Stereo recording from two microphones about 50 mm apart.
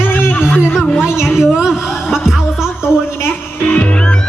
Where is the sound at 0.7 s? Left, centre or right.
Centre.